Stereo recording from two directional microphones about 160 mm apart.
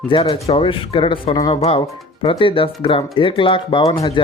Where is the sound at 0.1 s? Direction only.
30° left (ahead or behind).